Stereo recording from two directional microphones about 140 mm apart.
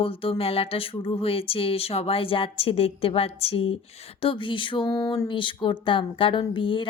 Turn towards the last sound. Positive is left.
turn(degrees=35)  # may be behind; listen again after turning